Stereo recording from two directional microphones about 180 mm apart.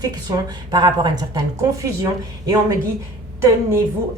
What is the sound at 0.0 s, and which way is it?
A woman's voice, 20° right (ahead or behind).